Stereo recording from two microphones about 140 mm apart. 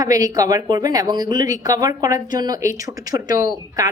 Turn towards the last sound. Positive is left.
turn(degrees=-25)  # may be behind; listen again after turning